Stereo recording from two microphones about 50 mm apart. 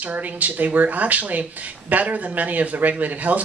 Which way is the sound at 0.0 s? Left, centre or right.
Right.